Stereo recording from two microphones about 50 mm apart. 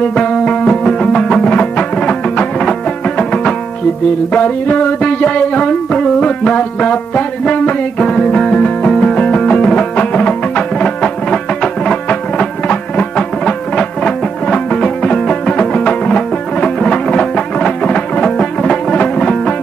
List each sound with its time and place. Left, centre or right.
0.1 s music: centre
4.3 s music: left